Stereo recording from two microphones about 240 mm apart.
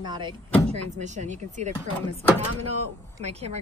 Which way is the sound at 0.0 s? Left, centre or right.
Centre.